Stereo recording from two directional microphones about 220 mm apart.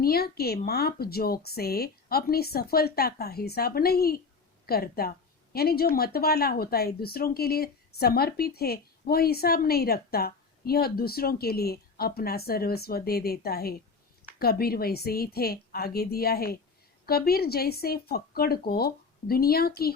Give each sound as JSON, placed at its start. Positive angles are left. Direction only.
{"t": 0.0, "sound": "speech", "side_deg": 45}